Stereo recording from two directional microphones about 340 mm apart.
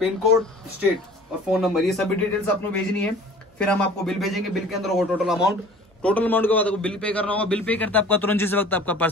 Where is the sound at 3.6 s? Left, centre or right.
Centre.